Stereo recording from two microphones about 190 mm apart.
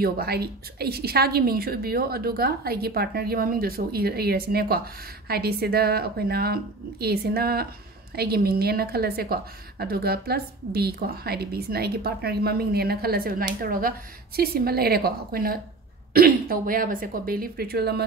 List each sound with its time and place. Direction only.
0.0 s a woman's voice: 55° right (ahead or behind)